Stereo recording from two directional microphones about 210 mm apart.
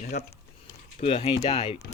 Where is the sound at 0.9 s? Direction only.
25° left (ahead or behind).